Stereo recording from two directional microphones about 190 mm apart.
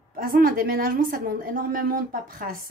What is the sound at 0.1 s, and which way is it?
Speech, 50° right (ahead or behind).